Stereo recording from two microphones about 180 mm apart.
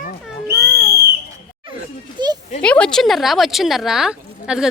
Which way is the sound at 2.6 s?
5° left (ahead or behind).